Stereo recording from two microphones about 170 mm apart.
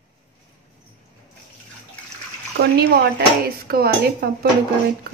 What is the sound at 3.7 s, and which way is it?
Speech, 65° right (ahead or behind).